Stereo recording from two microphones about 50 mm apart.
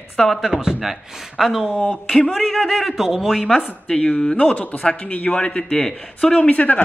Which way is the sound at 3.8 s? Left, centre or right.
Centre.